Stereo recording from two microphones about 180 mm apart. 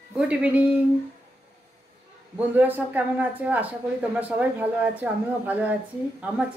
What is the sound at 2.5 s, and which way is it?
Speech, 10° right (ahead or behind).